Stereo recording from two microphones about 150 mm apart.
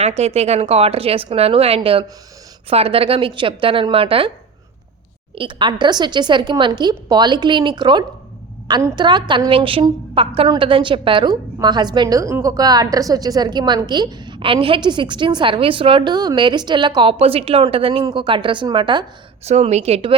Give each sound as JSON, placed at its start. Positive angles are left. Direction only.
{"t": 0.2, "sound": "a woman's voice", "side_deg": -45}
{"t": 5.3, "sound": "a woman's voice", "side_deg": -35}
{"t": 19.5, "sound": "a woman's voice", "side_deg": -45}